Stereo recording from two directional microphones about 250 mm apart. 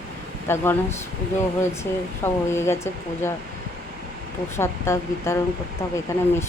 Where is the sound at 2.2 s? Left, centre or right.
Centre.